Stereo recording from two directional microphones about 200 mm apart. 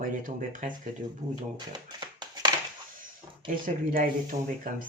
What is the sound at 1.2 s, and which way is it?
Speech, 20° right (ahead or behind).